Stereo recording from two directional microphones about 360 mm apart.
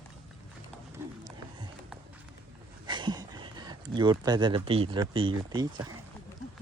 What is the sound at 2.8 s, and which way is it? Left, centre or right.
Speech, centre.